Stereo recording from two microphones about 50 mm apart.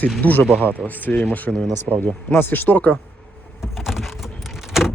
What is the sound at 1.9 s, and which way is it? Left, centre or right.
Speech, centre.